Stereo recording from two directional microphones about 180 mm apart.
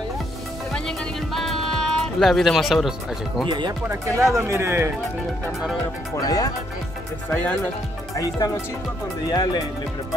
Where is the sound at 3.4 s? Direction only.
25° right (ahead or behind).